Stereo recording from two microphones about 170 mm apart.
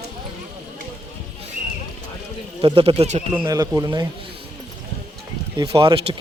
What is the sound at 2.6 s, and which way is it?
Speech, 30° right (ahead or behind).